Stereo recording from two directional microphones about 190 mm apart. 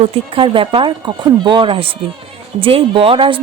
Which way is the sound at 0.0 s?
30° right (ahead or behind).